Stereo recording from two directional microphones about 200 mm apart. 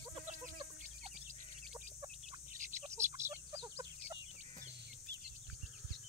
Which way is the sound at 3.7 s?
15° right (ahead or behind).